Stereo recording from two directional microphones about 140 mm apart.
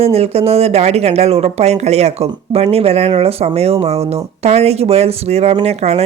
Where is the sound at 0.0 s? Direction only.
45° right (ahead or behind).